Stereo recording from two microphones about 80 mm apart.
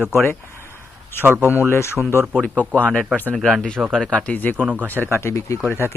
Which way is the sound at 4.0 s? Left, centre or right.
Centre.